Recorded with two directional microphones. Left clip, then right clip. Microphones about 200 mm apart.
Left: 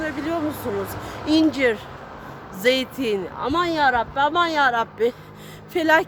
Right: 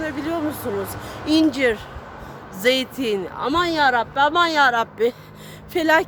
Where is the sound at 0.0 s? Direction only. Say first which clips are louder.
Even; 10° right (ahead or behind).